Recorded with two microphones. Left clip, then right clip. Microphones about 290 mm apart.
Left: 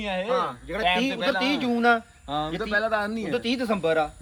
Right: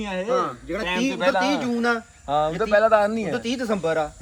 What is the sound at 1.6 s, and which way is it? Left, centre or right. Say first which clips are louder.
Speech: left 2 dB; centre.